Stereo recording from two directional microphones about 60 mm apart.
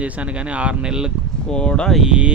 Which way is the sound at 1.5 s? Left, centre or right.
Centre.